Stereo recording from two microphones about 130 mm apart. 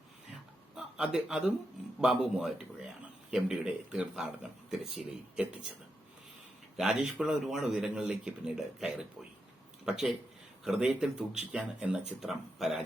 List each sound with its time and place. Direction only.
0.9 s a man's voice: 5° right (ahead or behind)
6.7 s a man's voice: 5° right (ahead or behind)